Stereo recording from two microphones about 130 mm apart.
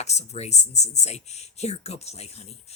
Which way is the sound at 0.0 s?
60° left (ahead or behind).